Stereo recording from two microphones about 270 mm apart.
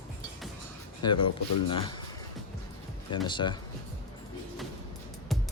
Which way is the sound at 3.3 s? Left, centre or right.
Centre.